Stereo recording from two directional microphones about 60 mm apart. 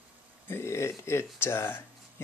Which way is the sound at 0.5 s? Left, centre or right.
Left.